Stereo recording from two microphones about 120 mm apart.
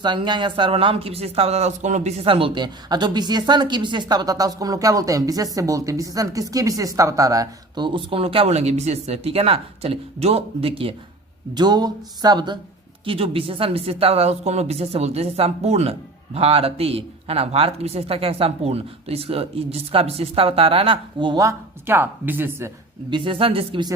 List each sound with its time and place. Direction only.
0.0 s speech: 40° right (ahead or behind); by 2.2 s 75° right (ahead or behind)
2.2 s a woman's voice: 50° right (ahead or behind); by 7.9 s 30° right (ahead or behind)
7.9 s a woman's voice: 45° right (ahead or behind)
11.5 s speech: 35° right (ahead or behind)
13.1 s a woman's voice: 50° right (ahead or behind)
21.4 s a woman's voice: 20° right (ahead or behind)
23.0 s speech: 45° right (ahead or behind)